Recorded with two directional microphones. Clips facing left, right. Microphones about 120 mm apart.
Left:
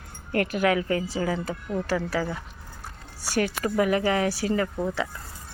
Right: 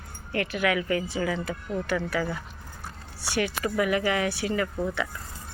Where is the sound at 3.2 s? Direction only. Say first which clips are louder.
Left 2 dB; 40° left (ahead or behind).